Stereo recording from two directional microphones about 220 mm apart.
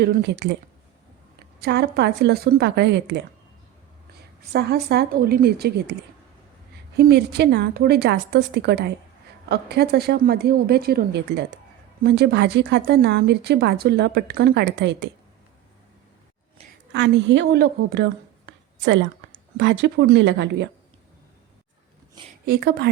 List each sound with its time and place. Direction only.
0.0 s speech: 45° right (ahead or behind)
1.6 s speech: 50° right (ahead or behind)
4.5 s speech: 50° right (ahead or behind)
16.9 s speech: 55° right (ahead or behind)
22.4 s speech: 45° right (ahead or behind)